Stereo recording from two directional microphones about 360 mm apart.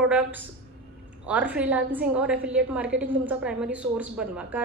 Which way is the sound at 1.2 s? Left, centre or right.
Centre.